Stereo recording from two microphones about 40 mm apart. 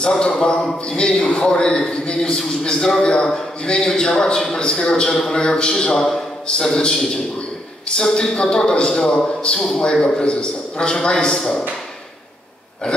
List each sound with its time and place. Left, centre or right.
0.0 s a man's voice: centre
7.9 s a man's voice: centre
10.2 s a man's voice: left